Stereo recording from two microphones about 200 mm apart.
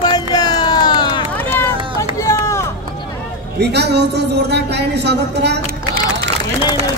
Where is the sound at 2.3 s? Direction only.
15° left (ahead or behind).